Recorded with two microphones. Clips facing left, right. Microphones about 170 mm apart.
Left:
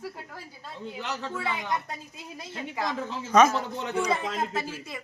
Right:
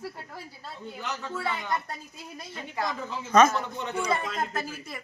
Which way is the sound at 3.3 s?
10° left (ahead or behind).